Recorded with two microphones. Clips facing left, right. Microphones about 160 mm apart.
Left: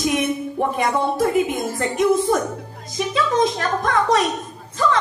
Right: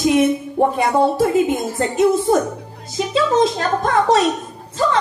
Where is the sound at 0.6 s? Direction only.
30° right (ahead or behind).